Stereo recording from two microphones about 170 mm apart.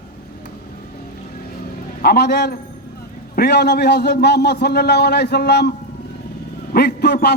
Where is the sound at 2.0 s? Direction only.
70° left (ahead or behind).